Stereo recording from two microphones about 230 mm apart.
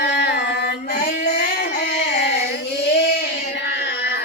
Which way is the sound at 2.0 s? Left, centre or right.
Left.